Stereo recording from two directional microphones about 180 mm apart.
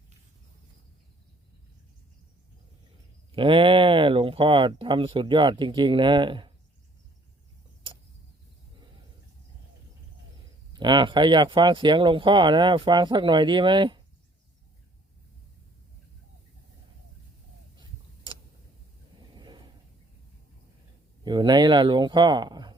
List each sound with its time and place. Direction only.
3.3 s speech: 30° right (ahead or behind)
10.7 s speech: 25° right (ahead or behind)
17.7 s tick-tock: 25° right (ahead or behind)
19.3 s a sound: 25° right (ahead or behind)
21.2 s speech: 25° right (ahead or behind)